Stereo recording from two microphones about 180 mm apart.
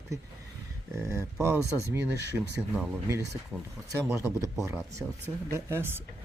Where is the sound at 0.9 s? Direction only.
15° right (ahead or behind).